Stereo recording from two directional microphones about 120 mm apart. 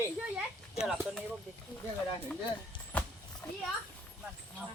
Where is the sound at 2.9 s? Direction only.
10° left (ahead or behind).